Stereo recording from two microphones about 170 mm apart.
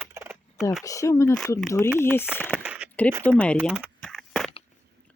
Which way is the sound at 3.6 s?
5° right (ahead or behind).